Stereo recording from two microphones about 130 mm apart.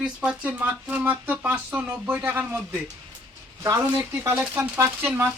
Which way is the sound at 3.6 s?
25° right (ahead or behind).